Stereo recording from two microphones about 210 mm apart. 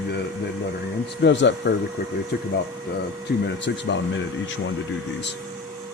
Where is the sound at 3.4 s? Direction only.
60° left (ahead or behind).